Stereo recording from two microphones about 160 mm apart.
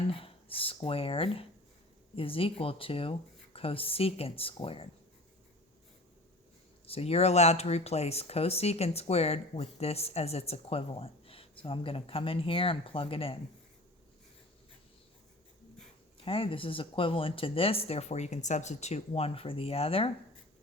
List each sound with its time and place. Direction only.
0.1 s speech: 35° left (ahead or behind)
6.8 s speech: 40° left (ahead or behind)
16.2 s speech: 35° left (ahead or behind)